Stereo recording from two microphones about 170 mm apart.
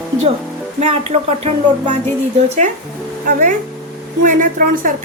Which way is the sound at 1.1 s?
40° right (ahead or behind).